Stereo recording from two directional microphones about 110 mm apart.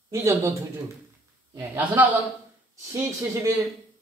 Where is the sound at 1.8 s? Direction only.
15° right (ahead or behind).